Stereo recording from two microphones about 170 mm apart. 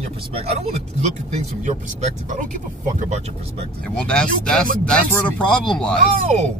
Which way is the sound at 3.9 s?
5° left (ahead or behind).